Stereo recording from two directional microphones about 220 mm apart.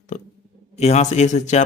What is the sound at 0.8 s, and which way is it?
Speech, 30° left (ahead or behind).